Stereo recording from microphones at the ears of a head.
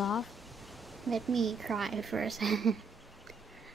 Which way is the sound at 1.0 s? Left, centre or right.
Right.